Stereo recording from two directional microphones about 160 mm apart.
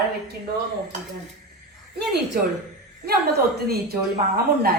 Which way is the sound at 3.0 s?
80° right.